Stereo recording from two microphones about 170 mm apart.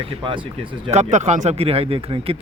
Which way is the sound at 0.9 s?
40° right (ahead or behind).